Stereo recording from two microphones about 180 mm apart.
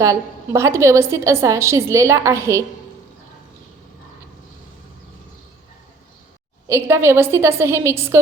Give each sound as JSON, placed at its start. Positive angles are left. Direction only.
{"t": 0.0, "sound": "a woman's voice", "side_deg": -15}
{"t": 6.7, "sound": "a woman's voice", "side_deg": -15}